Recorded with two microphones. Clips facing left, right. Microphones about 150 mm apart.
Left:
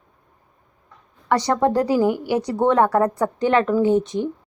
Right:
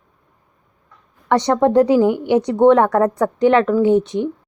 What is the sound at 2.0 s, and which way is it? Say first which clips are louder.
Speech: right 4 dB; 25° right (ahead or behind).